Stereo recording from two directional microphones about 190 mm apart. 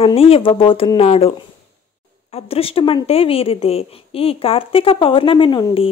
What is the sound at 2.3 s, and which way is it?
Speech, 30° left (ahead or behind).